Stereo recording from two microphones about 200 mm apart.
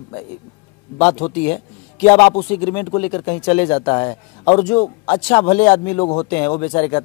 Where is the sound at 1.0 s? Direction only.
25° left (ahead or behind).